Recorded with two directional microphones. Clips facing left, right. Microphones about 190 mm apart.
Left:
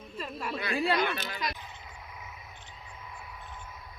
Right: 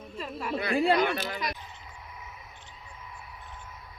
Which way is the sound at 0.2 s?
10° right (ahead or behind).